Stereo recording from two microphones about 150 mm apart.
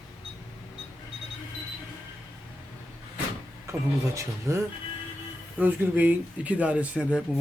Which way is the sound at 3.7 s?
20° right (ahead or behind).